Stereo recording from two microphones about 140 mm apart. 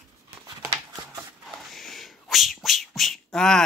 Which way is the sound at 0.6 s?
25° right (ahead or behind).